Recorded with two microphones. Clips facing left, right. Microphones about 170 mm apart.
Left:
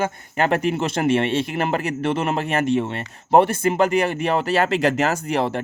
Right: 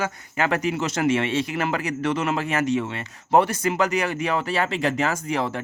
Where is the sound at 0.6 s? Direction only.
55° left (ahead or behind).